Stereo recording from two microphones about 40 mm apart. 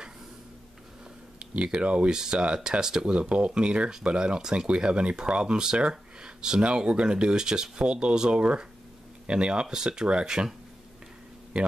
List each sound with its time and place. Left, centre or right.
1.4 s speech: right